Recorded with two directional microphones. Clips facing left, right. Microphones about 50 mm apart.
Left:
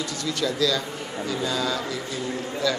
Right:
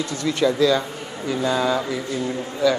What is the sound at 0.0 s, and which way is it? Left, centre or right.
Speech, right.